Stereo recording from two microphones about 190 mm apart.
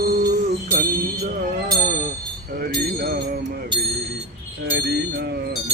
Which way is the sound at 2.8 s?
55° right (ahead or behind).